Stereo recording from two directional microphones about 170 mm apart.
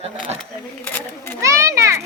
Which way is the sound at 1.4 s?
15° right (ahead or behind).